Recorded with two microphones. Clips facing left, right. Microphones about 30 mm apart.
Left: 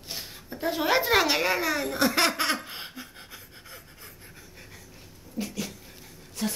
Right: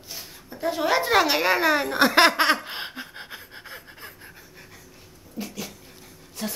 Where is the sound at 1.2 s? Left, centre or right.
Centre; by 4.1 s right.